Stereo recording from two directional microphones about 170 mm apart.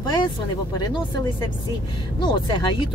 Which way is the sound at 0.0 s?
25° left (ahead or behind).